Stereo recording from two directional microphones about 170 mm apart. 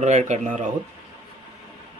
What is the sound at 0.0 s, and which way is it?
Speech, 45° right (ahead or behind).